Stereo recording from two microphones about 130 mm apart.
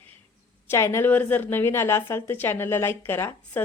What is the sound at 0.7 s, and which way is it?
Speech, 20° left (ahead or behind).